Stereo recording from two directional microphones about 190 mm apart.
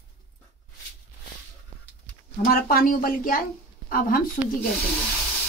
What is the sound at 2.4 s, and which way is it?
A woman's voice, 50° left (ahead or behind).